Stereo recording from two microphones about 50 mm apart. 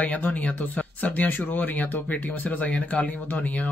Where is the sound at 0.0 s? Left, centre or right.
Left.